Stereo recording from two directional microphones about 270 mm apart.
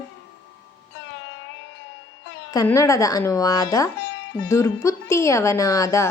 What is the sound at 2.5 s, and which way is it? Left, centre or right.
A woman's voice, centre.